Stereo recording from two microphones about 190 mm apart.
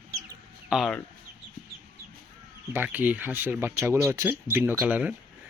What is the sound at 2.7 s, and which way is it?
Speech, 10° right (ahead or behind).